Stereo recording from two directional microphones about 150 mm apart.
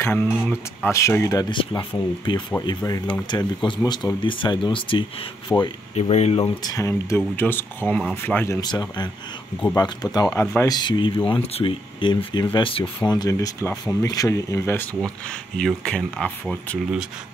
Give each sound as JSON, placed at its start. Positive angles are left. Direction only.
{"t": 0.0, "sound": "speech", "side_deg": 15}
{"t": 5.5, "sound": "speech", "side_deg": 15}
{"t": 5.9, "sound": "speech", "side_deg": 45}
{"t": 6.6, "sound": "speech", "side_deg": 20}
{"t": 8.5, "sound": "speech", "side_deg": 30}
{"t": 10.4, "sound": "speech", "side_deg": 10}
{"t": 10.7, "sound": "speech", "side_deg": 30}